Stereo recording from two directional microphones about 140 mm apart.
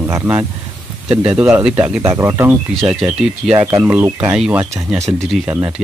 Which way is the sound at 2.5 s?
Centre (ahead or behind).